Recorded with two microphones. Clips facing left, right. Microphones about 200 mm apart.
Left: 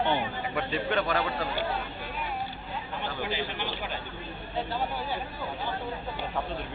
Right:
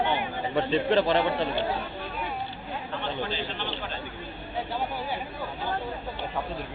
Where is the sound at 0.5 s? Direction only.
30° right (ahead or behind).